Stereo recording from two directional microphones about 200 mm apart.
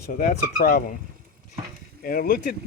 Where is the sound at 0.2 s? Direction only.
40° left (ahead or behind).